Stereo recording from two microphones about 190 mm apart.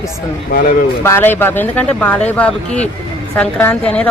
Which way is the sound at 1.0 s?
10° left (ahead or behind).